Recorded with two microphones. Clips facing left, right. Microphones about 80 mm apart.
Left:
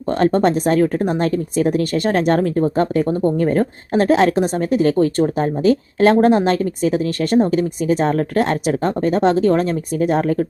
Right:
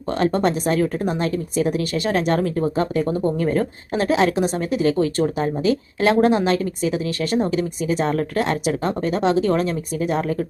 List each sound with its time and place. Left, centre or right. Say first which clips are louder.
0.1 s a woman's voice: left 4 dB; left